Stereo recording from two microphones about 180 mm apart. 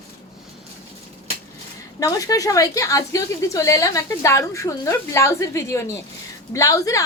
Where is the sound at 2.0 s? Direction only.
20° left (ahead or behind).